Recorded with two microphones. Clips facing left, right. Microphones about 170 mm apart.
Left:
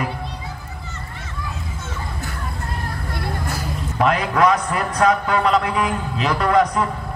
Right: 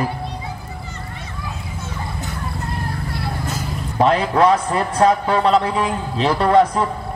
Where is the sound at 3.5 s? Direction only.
25° right (ahead or behind).